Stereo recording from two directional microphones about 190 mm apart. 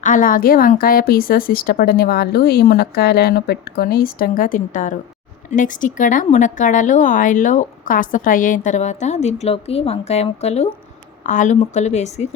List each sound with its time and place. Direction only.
0.0 s a woman's voice: 45° left (ahead or behind)